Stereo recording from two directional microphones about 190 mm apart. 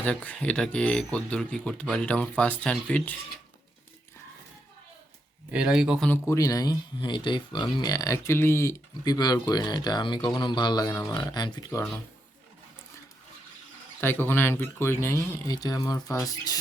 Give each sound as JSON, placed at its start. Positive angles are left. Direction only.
{"t": 0.0, "sound": "speech", "side_deg": 10}
{"t": 5.5, "sound": "speech", "side_deg": -5}
{"t": 6.1, "sound": "speech", "side_deg": 15}
{"t": 14.0, "sound": "speech", "side_deg": 10}